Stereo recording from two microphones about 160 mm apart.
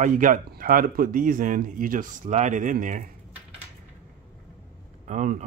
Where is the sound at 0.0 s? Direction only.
55° right (ahead or behind).